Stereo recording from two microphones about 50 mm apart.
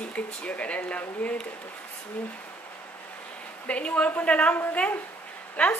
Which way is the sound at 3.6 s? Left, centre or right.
Left.